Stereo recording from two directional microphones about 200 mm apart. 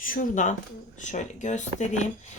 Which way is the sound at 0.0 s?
40° left (ahead or behind).